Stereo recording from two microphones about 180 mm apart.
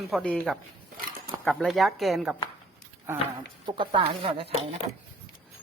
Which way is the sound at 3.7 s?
30° right (ahead or behind).